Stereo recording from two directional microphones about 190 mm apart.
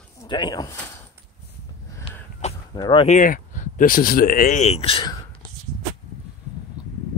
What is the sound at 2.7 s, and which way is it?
Speech, 20° left (ahead or behind).